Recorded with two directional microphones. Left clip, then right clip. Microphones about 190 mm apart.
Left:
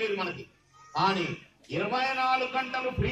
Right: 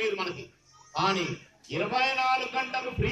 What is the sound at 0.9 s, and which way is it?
A man's voice, 5° right (ahead or behind).